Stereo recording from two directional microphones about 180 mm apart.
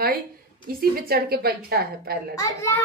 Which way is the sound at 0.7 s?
55° right (ahead or behind).